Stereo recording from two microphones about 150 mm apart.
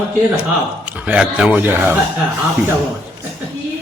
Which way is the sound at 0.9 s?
10° right (ahead or behind).